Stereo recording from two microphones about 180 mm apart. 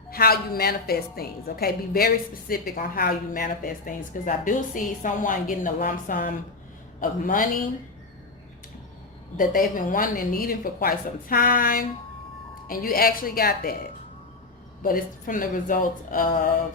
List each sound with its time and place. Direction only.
0.1 s a woman's voice: 55° left (ahead or behind)
9.4 s a woman's voice: 50° left (ahead or behind)
14.8 s a woman's voice: 50° left (ahead or behind)